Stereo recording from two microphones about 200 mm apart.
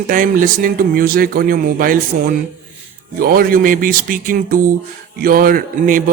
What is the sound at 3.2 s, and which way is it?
A man's voice, 45° right (ahead or behind).